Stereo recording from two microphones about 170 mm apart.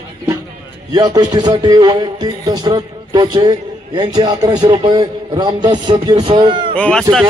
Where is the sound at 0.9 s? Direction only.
20° right (ahead or behind).